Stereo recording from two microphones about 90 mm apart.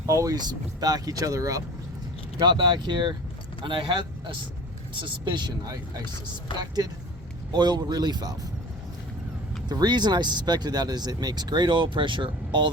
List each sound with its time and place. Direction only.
0.0 s speech: 35° right (ahead or behind)
2.4 s speech: 55° right (ahead or behind)
9.6 s speech: 50° right (ahead or behind)